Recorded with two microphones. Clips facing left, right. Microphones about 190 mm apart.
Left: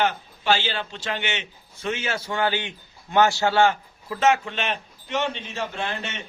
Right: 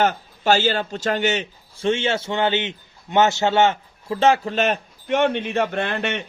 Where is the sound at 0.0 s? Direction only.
45° right (ahead or behind).